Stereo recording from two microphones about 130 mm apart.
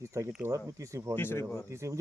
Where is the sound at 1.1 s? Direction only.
20° left (ahead or behind).